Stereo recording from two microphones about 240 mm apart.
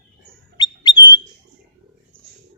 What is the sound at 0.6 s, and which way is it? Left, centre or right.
Bird, centre.